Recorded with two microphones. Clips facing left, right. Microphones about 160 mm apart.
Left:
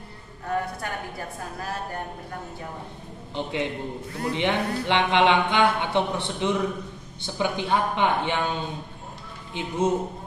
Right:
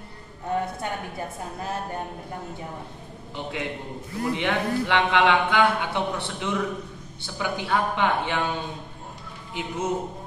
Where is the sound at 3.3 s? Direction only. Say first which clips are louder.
Left 3 dB; 25° left (ahead or behind).